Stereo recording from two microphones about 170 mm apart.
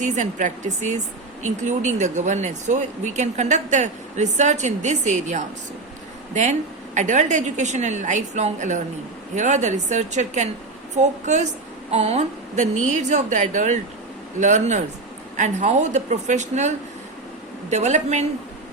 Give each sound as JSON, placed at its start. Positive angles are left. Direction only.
{"t": 0.0, "sound": "speech", "side_deg": -45}